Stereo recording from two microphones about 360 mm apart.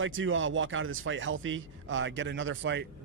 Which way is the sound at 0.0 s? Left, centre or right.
Right.